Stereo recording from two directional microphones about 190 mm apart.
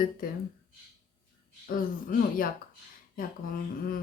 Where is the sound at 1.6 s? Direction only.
50° left (ahead or behind).